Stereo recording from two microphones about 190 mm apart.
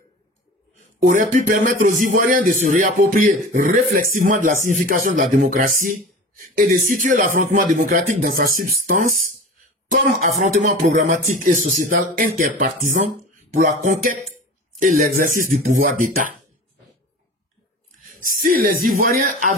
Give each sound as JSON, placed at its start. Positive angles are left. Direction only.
{"t": 0.9, "sound": "a man's voice", "side_deg": -45}
{"t": 18.2, "sound": "a man's voice", "side_deg": -45}